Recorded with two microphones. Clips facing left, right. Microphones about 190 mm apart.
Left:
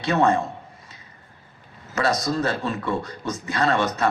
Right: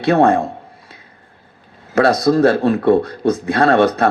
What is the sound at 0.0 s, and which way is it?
Speech, 55° right (ahead or behind).